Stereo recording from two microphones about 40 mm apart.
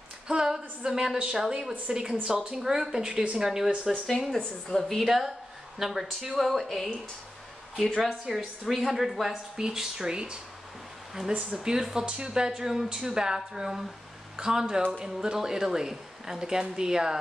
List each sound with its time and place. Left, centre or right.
0.3 s speech: centre
1.4 s speech: centre
4.4 s a woman's voice: left
5.0 s speech: centre
8.3 s speech: centre
11.5 s speech: centre